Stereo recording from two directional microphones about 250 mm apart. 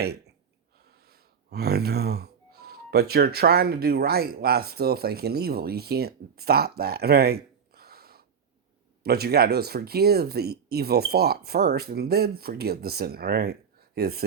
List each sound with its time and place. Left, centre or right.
0.0 s speech: right